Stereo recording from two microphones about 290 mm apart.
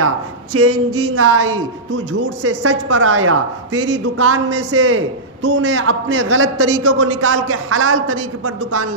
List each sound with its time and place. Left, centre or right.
0.0 s a woman's voice: right